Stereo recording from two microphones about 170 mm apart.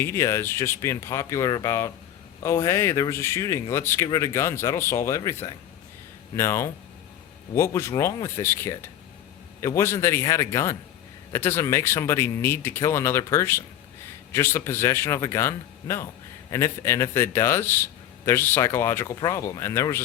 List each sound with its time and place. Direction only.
0.0 s speech: 15° left (ahead or behind)